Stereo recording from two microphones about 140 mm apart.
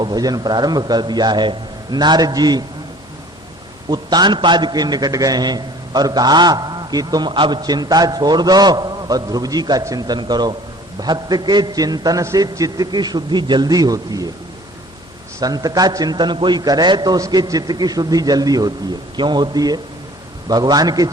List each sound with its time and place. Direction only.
0.0 s a man's voice: 30° right (ahead or behind)
3.8 s a man's voice: 30° right (ahead or behind)
15.4 s a man's voice: 25° right (ahead or behind)